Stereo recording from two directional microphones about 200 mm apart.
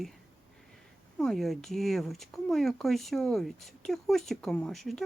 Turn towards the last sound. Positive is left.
turn(degrees=0)  # may be behind; listen again after turning